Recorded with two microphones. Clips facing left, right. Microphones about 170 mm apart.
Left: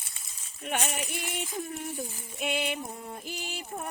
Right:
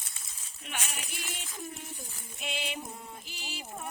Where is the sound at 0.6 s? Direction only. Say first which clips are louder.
Left 9 dB; 60° left (ahead or behind).